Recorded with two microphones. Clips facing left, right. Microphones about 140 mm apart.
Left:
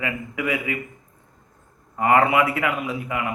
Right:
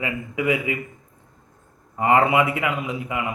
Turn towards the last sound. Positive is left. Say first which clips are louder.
# even
turn(degrees=-20)  # may be behind; listen again after turning